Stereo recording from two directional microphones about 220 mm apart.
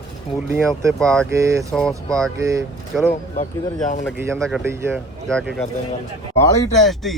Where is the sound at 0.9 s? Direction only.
5° left (ahead or behind).